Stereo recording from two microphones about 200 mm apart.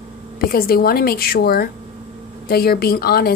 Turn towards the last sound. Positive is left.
turn(degrees=50)  # may be behind; listen again after turning